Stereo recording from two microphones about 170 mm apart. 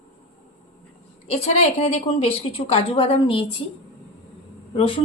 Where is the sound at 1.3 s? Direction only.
35° left (ahead or behind).